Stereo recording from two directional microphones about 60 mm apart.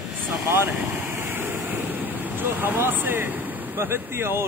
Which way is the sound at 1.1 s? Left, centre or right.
Right.